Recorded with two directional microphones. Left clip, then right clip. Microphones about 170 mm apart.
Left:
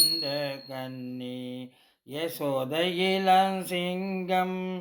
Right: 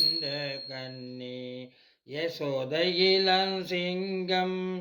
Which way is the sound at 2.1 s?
25° left (ahead or behind).